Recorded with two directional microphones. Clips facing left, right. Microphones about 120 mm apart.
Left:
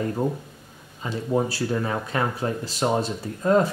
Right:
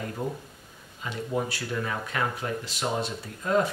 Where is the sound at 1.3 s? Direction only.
35° left (ahead or behind).